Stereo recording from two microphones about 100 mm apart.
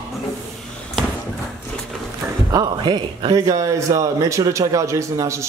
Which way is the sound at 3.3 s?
35° right (ahead or behind).